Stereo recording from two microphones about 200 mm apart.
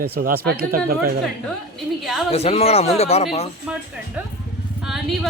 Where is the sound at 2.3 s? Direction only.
30° left (ahead or behind).